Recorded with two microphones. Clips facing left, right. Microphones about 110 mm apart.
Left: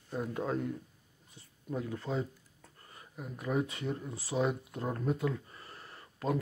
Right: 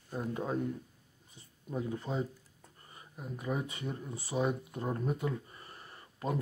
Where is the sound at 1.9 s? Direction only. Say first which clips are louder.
Even; 15° right (ahead or behind).